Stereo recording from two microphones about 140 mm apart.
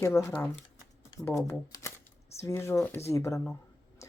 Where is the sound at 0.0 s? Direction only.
20° left (ahead or behind).